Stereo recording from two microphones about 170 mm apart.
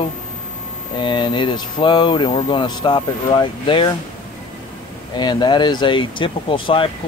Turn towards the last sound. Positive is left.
turn(degrees=30)  # may be behind; listen again after turning